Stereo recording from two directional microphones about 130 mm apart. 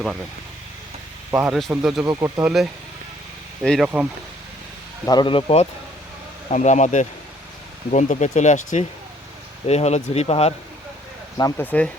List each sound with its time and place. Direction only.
1.3 s speech: 10° right (ahead or behind)
2.0 s speech: 25° right (ahead or behind)
2.4 s speech: 5° right (ahead or behind)
5.0 s speech: 35° left (ahead or behind)
6.5 s speech: 65° left (ahead or behind)
9.6 s speech: 55° left (ahead or behind)
11.5 s speech: 15° left (ahead or behind)